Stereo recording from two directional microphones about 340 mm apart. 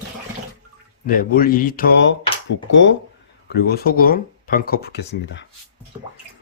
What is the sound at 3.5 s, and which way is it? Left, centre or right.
Speech, left.